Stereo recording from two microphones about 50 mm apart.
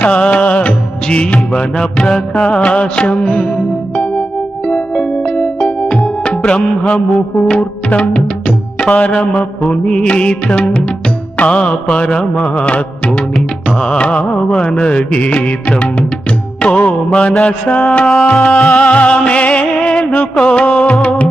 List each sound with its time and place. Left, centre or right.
0.0 s music of bollywood: left
7.4 s music: left